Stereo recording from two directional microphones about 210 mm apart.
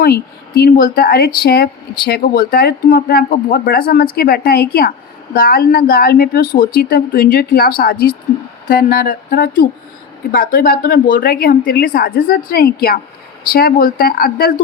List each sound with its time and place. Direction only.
0.0 s speech: 45° left (ahead or behind)